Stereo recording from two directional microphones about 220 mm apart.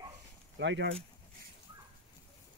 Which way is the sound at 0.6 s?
55° right (ahead or behind).